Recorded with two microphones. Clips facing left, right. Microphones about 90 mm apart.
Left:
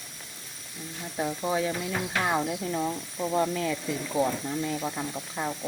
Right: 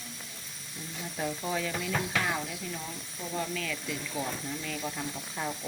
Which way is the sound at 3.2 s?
35° left (ahead or behind).